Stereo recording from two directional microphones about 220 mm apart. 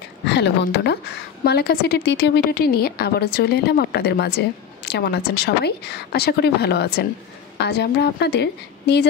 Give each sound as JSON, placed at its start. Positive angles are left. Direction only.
{"t": 0.3, "sound": "a woman's voice", "side_deg": 50}